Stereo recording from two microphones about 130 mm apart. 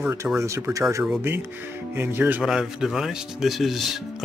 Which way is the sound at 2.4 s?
5° right (ahead or behind).